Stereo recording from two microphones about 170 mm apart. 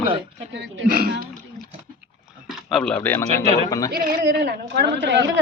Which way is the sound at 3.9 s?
55° right (ahead or behind).